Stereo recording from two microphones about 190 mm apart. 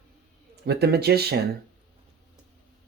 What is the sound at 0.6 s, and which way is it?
Speech, 55° right (ahead or behind).